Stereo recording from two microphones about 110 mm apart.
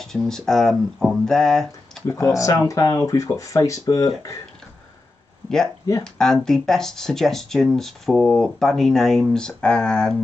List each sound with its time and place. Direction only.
0.0 s speech: 5° left (ahead or behind)
2.0 s speech: 30° left (ahead or behind)
6.1 s speech: 5° left (ahead or behind)